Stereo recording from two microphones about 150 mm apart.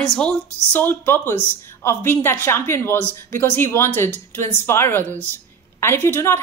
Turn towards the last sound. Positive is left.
turn(degrees=15)  # may be behind; listen again after turning